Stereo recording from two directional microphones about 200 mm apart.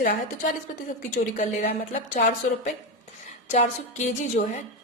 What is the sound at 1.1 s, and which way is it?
A woman's voice, 45° left (ahead or behind).